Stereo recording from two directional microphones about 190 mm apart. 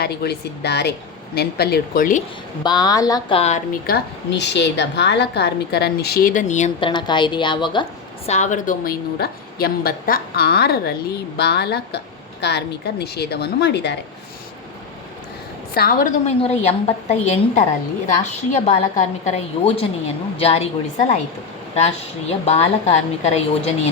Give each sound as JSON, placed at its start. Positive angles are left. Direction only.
{"t": 0.0, "sound": "a woman's voice", "side_deg": 60}
{"t": 2.6, "sound": "speech", "side_deg": 20}
{"t": 3.8, "sound": "a woman's voice", "side_deg": 60}
{"t": 6.7, "sound": "speech", "side_deg": 25}
{"t": 8.3, "sound": "a woman's voice", "side_deg": 40}
{"t": 15.7, "sound": "a woman's voice", "side_deg": 50}
{"t": 16.2, "sound": "a woman's voice", "side_deg": 35}
{"t": 21.8, "sound": "a woman's voice", "side_deg": 35}